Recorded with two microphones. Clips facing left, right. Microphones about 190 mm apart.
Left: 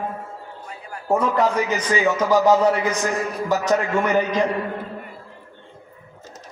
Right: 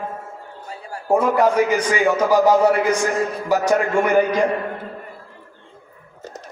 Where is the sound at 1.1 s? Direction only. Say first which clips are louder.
Right 3 dB; 10° right (ahead or behind).